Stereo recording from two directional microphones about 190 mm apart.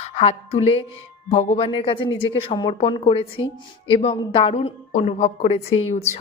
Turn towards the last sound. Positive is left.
turn(degrees=35)  # may be behind; listen again after turning